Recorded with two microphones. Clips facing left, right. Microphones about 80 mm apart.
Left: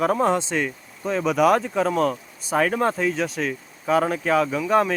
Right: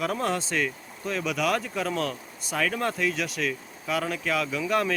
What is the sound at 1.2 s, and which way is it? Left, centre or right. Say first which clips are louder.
Speech: left 9 dB; left.